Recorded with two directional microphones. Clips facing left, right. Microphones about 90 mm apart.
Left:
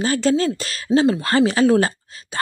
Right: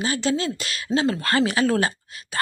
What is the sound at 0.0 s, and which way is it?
Speech, 40° left (ahead or behind).